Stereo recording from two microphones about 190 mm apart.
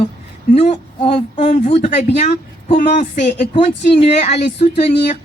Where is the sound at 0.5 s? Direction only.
35° left (ahead or behind).